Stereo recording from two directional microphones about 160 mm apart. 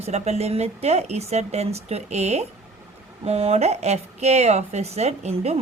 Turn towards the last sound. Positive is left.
turn(degrees=-40)  # may be behind; listen again after turning